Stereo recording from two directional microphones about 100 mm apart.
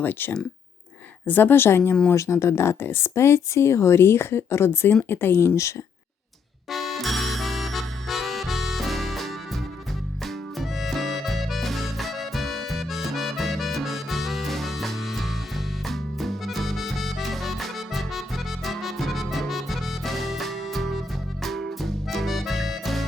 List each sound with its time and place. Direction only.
0.0 s speech: 20° left (ahead or behind)
6.7 s music: centre (ahead or behind)